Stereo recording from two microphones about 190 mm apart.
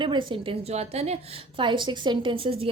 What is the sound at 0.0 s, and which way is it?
A woman's voice, 25° right (ahead or behind).